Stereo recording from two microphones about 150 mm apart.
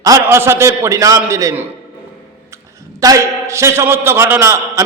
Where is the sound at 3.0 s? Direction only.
20° right (ahead or behind).